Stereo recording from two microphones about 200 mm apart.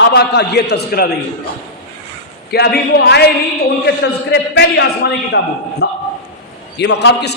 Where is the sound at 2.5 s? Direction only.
55° left (ahead or behind).